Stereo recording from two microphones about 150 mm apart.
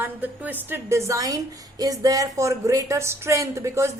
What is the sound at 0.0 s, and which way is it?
A woman's voice, 10° right (ahead or behind).